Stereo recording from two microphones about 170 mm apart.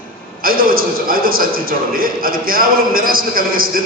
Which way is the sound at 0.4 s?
60° right (ahead or behind).